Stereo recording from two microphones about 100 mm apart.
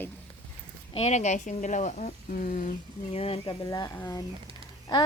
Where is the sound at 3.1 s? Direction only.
75° left (ahead or behind).